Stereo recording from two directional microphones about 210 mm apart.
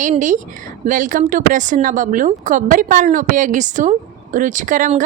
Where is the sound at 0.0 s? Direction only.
35° right (ahead or behind).